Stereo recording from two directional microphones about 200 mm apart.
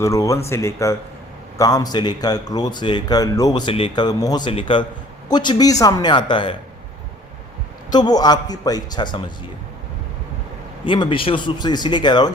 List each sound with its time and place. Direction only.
0.0 s speech: 15° left (ahead or behind)
7.9 s speech: 20° left (ahead or behind)
10.8 s speech: 25° left (ahead or behind)